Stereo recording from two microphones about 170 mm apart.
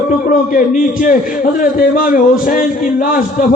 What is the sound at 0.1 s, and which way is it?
Speech, 50° left (ahead or behind).